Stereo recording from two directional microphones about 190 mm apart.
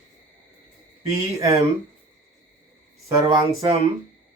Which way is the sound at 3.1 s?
25° right (ahead or behind).